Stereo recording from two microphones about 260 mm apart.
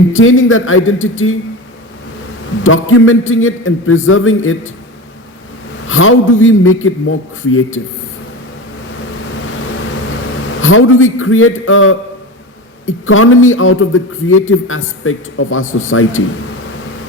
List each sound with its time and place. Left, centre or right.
0.1 s a man's voice: left
2.6 s a man's voice: left
5.9 s a man's voice: left
10.6 s a man's voice: left